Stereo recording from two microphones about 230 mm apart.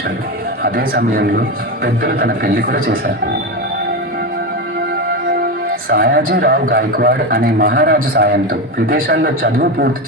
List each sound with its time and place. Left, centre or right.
0.6 s a man's voice: right
5.9 s a man's voice: right